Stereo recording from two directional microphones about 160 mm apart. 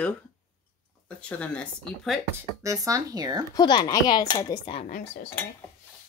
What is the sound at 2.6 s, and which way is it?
Speech, 20° right (ahead or behind).